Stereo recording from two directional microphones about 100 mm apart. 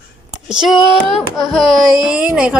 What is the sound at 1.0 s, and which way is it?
Music, centre (ahead or behind).